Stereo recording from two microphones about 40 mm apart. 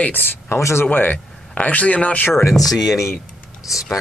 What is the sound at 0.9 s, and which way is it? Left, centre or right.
Speech, left.